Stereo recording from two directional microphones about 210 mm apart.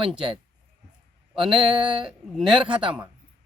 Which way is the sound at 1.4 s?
25° right (ahead or behind).